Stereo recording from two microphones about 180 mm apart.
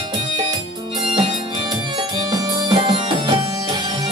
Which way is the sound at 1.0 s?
30° right (ahead or behind).